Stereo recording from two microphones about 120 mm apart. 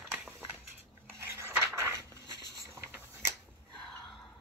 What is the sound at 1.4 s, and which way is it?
Dishes, 20° right (ahead or behind).